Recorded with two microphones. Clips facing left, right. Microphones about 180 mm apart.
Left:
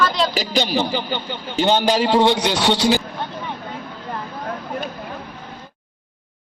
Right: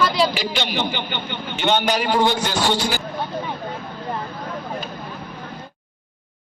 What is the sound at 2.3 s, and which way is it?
Speech, 75° left (ahead or behind).